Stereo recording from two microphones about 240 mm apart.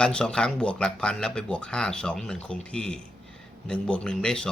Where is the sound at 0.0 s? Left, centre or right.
Centre.